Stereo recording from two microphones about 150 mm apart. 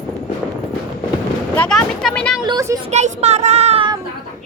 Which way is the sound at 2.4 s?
25° right (ahead or behind).